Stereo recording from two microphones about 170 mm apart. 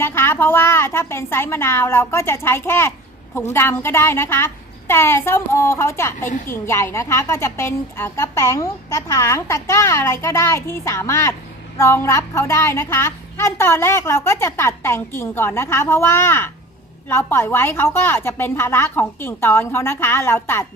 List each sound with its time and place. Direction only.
0.0 s a woman's voice: 15° left (ahead or behind)